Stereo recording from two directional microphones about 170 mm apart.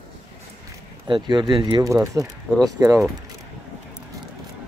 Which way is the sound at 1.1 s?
25° right (ahead or behind).